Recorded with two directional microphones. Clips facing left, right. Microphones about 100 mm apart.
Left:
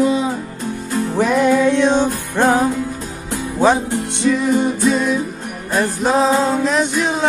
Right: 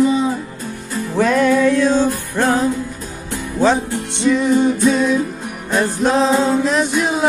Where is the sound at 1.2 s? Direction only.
15° left (ahead or behind).